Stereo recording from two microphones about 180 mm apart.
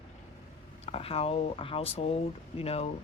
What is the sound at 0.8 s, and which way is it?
Speech, 30° left (ahead or behind).